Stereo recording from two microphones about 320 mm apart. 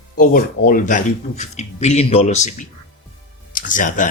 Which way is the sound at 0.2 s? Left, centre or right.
Left.